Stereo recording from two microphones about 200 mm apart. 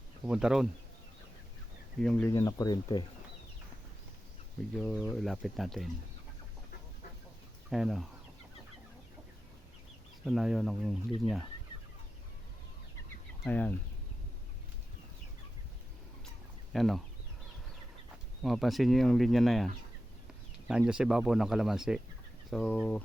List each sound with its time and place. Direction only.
0.3 s speech: 5° right (ahead or behind)
2.0 s speech: 5° left (ahead or behind)
2.3 s speech: 20° left (ahead or behind)
4.7 s speech: centre (ahead or behind)
7.7 s speech: centre (ahead or behind)
10.2 s speech: centre (ahead or behind)
13.4 s speech: 10° left (ahead or behind)
16.7 s speech: centre (ahead or behind)
18.4 s speech: centre (ahead or behind)